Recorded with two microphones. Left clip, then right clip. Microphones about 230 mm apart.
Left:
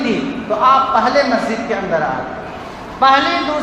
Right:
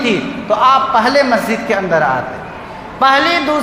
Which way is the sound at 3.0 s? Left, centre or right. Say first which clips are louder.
Right 1 dB; right.